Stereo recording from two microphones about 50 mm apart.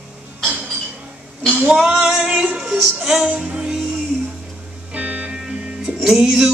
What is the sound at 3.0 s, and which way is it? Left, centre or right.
Music, centre.